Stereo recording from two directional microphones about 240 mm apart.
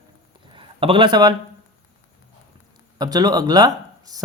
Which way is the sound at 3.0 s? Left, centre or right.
Centre.